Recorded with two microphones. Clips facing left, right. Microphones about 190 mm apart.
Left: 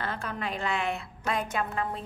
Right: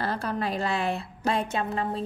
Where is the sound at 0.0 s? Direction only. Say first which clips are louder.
Right 5 dB; 35° right (ahead or behind).